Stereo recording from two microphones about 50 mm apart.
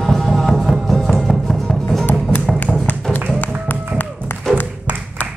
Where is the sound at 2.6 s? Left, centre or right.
Left.